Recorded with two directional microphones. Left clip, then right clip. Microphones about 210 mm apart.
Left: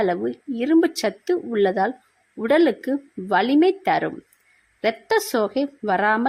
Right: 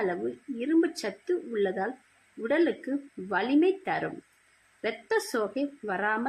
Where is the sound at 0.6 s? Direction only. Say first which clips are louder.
Left 8 dB; 45° left (ahead or behind).